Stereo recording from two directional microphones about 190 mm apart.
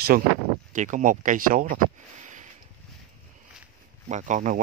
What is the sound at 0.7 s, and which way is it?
Speech, 40° right (ahead or behind).